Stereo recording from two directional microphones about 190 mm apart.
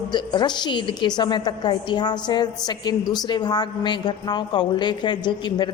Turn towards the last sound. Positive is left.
turn(degrees=25)  # may be behind; listen again after turning